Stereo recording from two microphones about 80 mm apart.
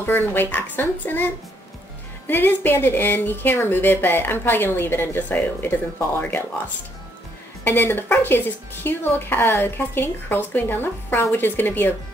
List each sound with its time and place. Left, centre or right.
0.0 s speech: left
2.2 s speech: left
7.6 s speech: left